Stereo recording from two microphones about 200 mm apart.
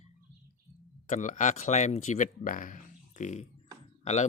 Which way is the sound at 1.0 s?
40° left (ahead or behind).